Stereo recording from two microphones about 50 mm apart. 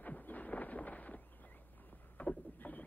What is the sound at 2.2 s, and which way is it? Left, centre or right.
Rowboat, left.